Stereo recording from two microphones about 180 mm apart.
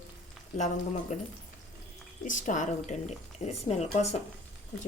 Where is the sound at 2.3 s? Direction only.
45° left (ahead or behind).